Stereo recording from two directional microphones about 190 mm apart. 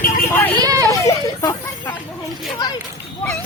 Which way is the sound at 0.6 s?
20° right (ahead or behind).